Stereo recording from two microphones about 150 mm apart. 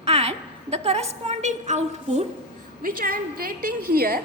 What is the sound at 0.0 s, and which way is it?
A woman's voice, 40° right (ahead or behind).